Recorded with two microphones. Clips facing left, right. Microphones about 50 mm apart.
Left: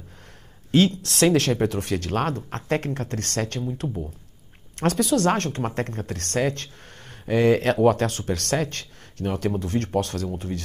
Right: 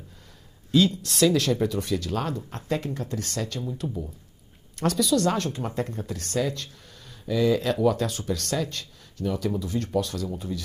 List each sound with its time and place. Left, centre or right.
0.7 s speech: left
4.7 s speech: left